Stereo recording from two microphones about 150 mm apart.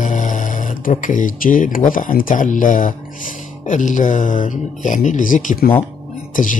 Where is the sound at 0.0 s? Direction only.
55° left (ahead or behind).